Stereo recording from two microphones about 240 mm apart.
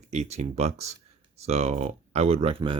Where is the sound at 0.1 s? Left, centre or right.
Right.